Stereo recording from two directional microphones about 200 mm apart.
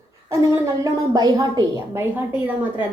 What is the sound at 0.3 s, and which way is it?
Speech, 15° right (ahead or behind).